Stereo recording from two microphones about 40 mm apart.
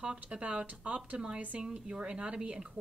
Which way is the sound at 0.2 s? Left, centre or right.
Right.